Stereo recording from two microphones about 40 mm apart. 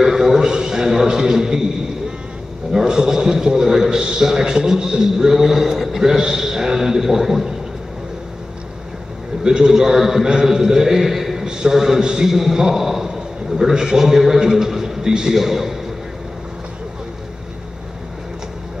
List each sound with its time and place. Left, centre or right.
0.0 s a man's voice: centre
9.4 s a man's voice: centre
11.4 s a man's voice: centre